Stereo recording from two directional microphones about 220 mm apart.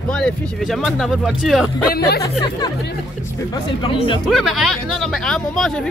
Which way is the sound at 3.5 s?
20° left (ahead or behind).